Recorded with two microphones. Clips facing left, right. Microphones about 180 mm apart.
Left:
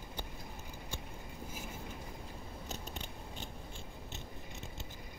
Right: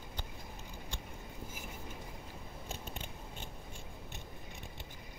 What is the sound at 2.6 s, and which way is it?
Scissors, 40° left (ahead or behind).